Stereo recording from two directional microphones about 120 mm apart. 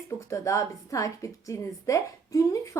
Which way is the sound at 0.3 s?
25° left (ahead or behind).